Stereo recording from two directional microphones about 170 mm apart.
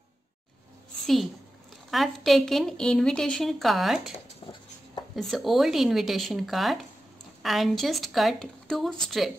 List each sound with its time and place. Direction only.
1.0 s a woman's voice: centre (ahead or behind)
4.4 s writing: 30° left (ahead or behind)
5.1 s a woman's voice: centre (ahead or behind)